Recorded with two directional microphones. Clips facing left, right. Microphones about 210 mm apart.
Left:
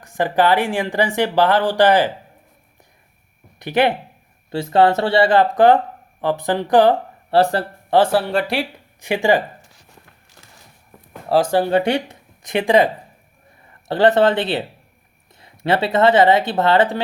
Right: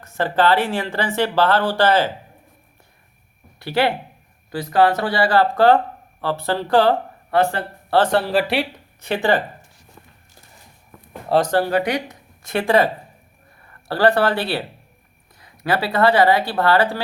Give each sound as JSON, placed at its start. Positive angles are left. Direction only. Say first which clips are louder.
{"t": 0.0, "sound": "speech", "louder": "left 1 dB", "side_deg": 15}
{"t": 3.6, "sound": "speech", "louder": "left 2 dB", "side_deg": 20}
{"t": 7.3, "sound": "speech", "louder": "left 3 dB", "side_deg": 35}
{"t": 7.9, "sound": "speech", "louder": "left 2 dB", "side_deg": 10}
{"t": 8.2, "sound": "speech", "louder": "right 1 dB", "side_deg": 0}
{"t": 9.0, "sound": "speech", "louder": "left 2 dB", "side_deg": 15}
{"t": 11.3, "sound": "speech", "louder": "left 1 dB", "side_deg": 0}
{"t": 11.7, "sound": "speech", "louder": "left 3 dB", "side_deg": 30}
{"t": 12.4, "sound": "speech", "louder": "left 2 dB", "side_deg": 15}